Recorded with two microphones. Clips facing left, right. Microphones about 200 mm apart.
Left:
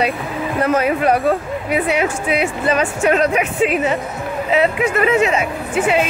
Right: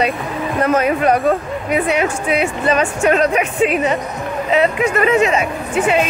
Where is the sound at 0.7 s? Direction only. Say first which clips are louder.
Right 1 dB; 10° left (ahead or behind).